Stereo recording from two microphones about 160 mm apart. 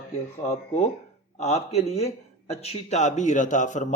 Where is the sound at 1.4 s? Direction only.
40° left (ahead or behind).